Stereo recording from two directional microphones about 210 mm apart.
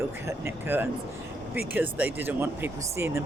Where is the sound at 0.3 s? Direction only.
10° right (ahead or behind).